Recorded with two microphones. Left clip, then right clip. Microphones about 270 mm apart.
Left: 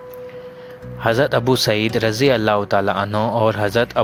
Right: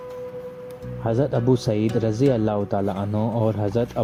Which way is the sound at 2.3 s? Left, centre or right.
Left.